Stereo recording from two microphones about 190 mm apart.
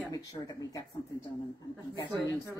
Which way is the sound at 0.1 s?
20° left (ahead or behind).